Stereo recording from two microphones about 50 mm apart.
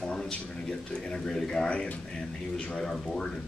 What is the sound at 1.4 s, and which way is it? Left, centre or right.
Speech, centre.